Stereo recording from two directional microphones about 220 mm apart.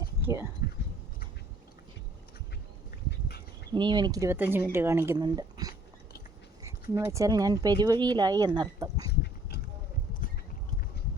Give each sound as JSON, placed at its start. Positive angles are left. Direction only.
{"t": 0.3, "sound": "speech", "side_deg": -15}
{"t": 3.1, "sound": "dog", "side_deg": 45}
{"t": 3.7, "sound": "speech", "side_deg": -20}
{"t": 6.9, "sound": "speech", "side_deg": -15}